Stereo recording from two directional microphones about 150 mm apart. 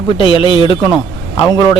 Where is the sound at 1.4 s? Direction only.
25° left (ahead or behind).